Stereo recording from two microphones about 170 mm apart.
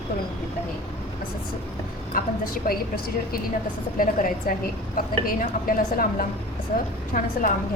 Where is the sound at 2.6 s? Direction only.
60° left (ahead or behind).